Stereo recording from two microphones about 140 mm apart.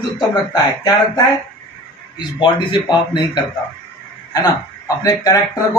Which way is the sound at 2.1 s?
35° left (ahead or behind).